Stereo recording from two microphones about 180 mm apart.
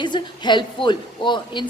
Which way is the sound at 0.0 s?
25° left (ahead or behind).